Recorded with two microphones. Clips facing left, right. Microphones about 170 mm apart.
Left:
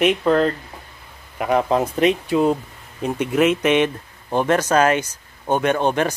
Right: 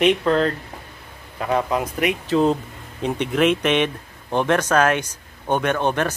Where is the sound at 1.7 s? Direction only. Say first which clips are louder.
Left 4 dB; 25° left (ahead or behind).